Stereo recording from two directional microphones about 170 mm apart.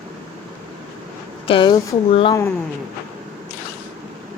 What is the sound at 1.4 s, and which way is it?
Speech, 30° left (ahead or behind).